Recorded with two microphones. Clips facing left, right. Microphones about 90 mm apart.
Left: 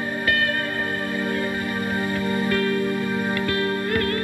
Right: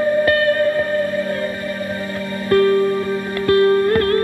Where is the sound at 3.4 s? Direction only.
40° right (ahead or behind).